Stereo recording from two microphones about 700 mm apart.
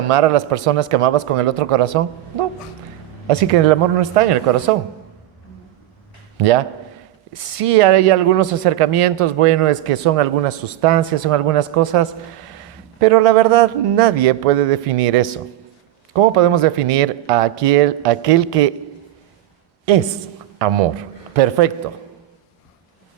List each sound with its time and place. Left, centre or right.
0.1 s speech: right
3.2 s speech: right
7.3 s speech: right
20.6 s speech: right